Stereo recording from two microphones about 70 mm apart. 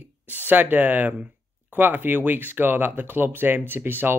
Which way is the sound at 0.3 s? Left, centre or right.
Right.